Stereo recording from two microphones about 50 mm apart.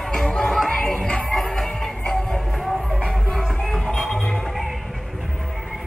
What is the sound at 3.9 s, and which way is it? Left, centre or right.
Music, left.